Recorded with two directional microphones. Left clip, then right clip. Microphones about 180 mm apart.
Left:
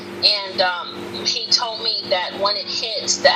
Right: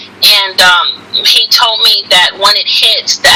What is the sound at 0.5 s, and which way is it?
Speech, 50° right (ahead or behind).